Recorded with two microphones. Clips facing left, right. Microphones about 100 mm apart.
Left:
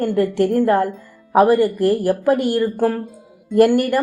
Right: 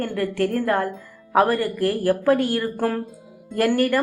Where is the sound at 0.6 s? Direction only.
35° left (ahead or behind).